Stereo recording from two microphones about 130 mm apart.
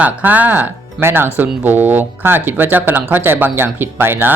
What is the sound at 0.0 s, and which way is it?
Speech, 15° right (ahead or behind).